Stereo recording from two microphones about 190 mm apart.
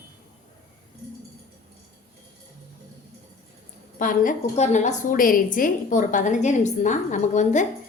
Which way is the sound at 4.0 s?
45° left (ahead or behind).